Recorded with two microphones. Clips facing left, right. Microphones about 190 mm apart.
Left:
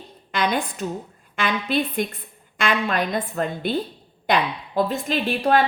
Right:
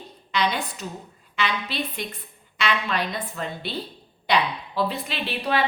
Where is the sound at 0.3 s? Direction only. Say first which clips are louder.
Left 2 dB; 50° left (ahead or behind).